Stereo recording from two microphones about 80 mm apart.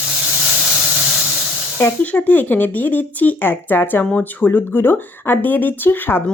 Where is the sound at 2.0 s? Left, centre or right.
Centre.